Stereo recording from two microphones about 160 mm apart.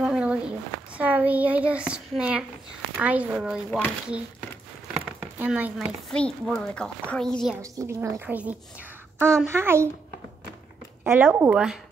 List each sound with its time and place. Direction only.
0.0 s a sound: 5° right (ahead or behind)
3.0 s a woman's voice: 10° right (ahead or behind)
4.9 s a sound: 10° right (ahead or behind)
5.8 s a woman's voice: centre (ahead or behind)
7.6 s a woman's voice: 20° right (ahead or behind)
9.2 s a woman's voice: 5° left (ahead or behind)
9.5 s a woman's voice: 15° right (ahead or behind)
11.1 s a woman's voice: 15° right (ahead or behind)